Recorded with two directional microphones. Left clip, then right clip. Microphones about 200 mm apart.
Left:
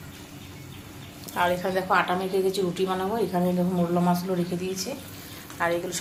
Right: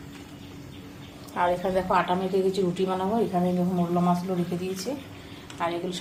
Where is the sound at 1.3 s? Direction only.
5° right (ahead or behind).